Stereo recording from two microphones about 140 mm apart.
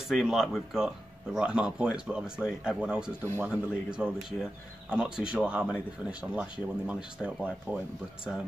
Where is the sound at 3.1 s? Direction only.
15° left (ahead or behind).